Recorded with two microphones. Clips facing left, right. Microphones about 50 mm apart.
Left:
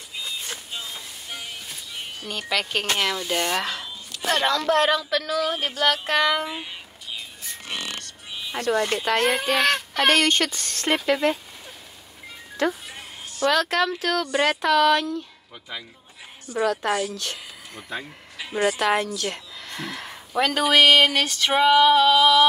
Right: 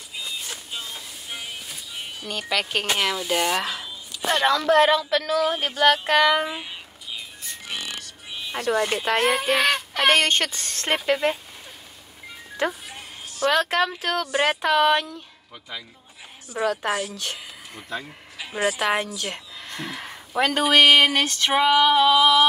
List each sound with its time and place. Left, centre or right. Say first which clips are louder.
0.1 s speech: left 1 dB; centre
7.6 s music: left 1 dB; centre
10.1 s speech: even; right
11.0 s speech: even; centre
12.8 s music: even; centre
13.5 s speech: even; centre
16.4 s a woman's voice: left 1 dB; centre
17.2 s a sound: right 1 dB; centre
18.4 s a woman's voice: left 1 dB; centre